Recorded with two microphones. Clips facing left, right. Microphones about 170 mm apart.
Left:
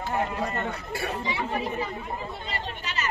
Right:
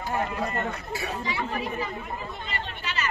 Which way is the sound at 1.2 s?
25° left (ahead or behind).